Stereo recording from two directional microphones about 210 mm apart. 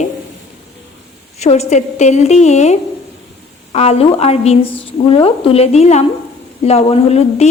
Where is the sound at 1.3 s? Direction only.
30° left (ahead or behind).